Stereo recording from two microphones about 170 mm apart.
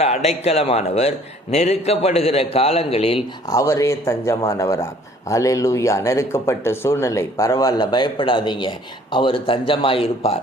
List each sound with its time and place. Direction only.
0.3 s a man's voice: 35° left (ahead or behind)
3.5 s a man's voice: 20° left (ahead or behind)